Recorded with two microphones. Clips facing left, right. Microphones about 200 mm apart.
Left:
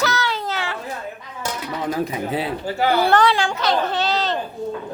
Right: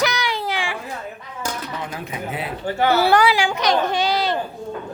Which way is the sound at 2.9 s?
10° right (ahead or behind).